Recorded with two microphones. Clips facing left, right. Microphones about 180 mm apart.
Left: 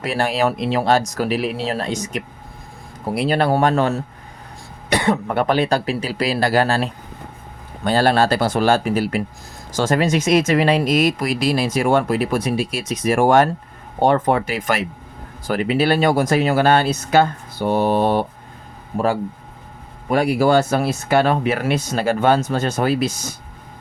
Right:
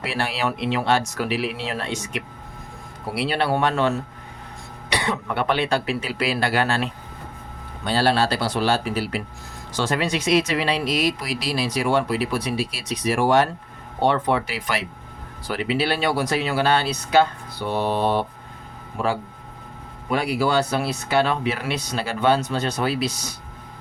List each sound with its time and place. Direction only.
0.0 s speech: 45° left (ahead or behind)
7.9 s speech: 50° left (ahead or behind)
20.1 s speech: 50° left (ahead or behind)